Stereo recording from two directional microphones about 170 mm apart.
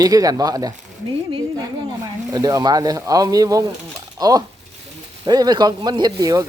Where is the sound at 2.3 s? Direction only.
20° right (ahead or behind).